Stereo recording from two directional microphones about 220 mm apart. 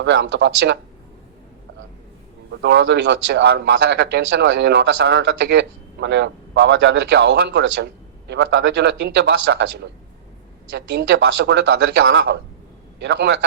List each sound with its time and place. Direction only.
0.0 s speech: 50° right (ahead or behind)
2.5 s speech: 50° right (ahead or behind)